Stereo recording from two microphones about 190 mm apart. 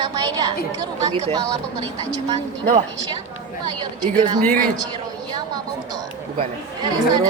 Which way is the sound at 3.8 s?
25° right (ahead or behind).